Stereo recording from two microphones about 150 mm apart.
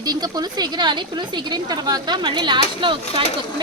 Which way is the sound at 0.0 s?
25° right (ahead or behind).